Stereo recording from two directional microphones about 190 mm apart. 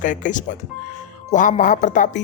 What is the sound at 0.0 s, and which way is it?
Speech, 40° left (ahead or behind).